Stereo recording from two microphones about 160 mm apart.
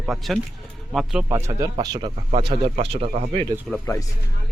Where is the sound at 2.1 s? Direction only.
45° right (ahead or behind).